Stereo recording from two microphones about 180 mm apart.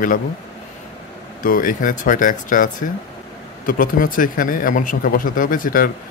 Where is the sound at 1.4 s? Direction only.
50° left (ahead or behind).